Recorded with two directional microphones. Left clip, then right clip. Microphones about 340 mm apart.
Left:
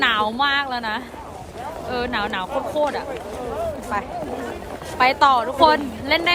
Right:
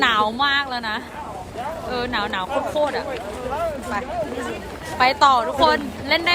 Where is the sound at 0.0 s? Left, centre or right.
Centre.